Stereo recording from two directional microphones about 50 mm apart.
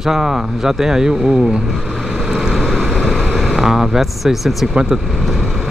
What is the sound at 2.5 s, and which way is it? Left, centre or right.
Vehicle, centre.